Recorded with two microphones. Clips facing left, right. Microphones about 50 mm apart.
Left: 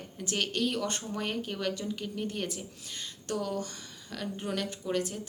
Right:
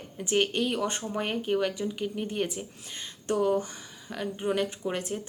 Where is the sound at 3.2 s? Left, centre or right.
Right.